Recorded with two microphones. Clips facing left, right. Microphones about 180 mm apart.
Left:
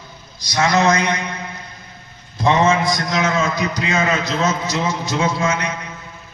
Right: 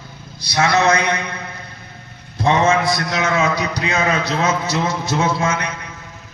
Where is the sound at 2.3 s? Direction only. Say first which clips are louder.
Even; 60° right (ahead or behind).